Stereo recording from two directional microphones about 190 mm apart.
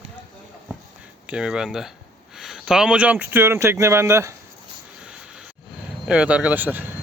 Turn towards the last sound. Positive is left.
turn(degrees=-10)  # may be behind; listen again after turning